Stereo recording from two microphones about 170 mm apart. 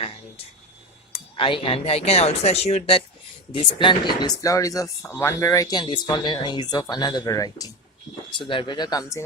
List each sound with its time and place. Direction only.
1.1 s speech: 30° left (ahead or behind)
3.5 s speech: 30° left (ahead or behind)